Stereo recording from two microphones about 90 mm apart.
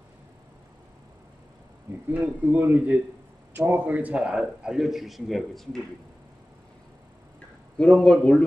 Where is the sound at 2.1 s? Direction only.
20° right (ahead or behind); by 5.8 s 5° left (ahead or behind).